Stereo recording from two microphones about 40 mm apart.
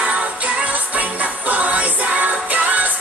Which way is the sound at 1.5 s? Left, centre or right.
Right.